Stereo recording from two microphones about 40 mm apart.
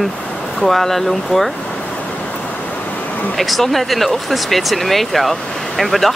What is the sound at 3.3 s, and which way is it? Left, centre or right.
Speech, centre.